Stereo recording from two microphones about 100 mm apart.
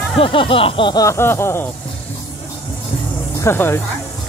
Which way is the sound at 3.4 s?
25° left (ahead or behind).